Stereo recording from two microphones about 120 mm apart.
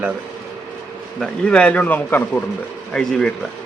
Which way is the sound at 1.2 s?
10° left (ahead or behind).